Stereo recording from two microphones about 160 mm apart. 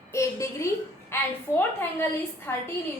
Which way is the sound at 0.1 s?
20° left (ahead or behind).